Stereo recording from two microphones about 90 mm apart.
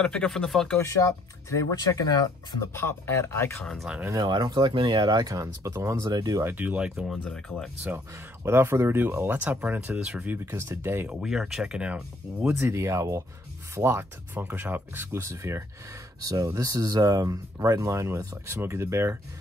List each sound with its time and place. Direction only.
0.0 s speech: 10° left (ahead or behind)
0.7 s speech: 30° left (ahead or behind)
2.7 s speech: 30° left (ahead or behind)
3.6 s speech: centre (ahead or behind)
4.1 s speech: 50° right (ahead or behind)
6.4 s speech: 20° right (ahead or behind)
7.1 s speech: 5° left (ahead or behind)
8.5 s speech: 30° right (ahead or behind)
11.1 s speech: 10° right (ahead or behind)
12.5 s speech: 30° right (ahead or behind)